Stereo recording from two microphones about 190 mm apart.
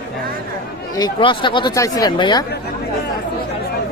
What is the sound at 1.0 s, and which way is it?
Speech, 25° left (ahead or behind).